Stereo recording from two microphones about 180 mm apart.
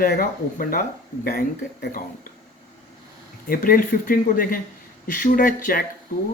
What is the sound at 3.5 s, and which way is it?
Speech, 50° left (ahead or behind).